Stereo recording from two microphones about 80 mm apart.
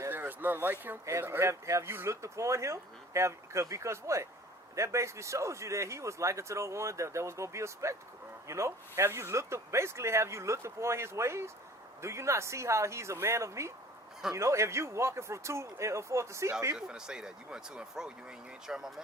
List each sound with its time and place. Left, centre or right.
0.1 s a sound: right
1.2 s speech: right
16.7 s speech: centre